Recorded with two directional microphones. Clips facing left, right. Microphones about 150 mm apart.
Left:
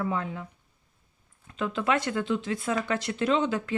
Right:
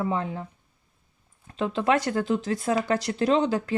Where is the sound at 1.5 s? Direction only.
30° right (ahead or behind).